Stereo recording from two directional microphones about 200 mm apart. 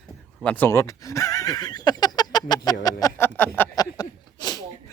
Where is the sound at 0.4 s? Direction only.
10° left (ahead or behind).